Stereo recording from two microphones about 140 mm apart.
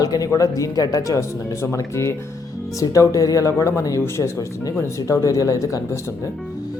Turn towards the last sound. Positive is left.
turn(degrees=20)  # may be behind; listen again after turning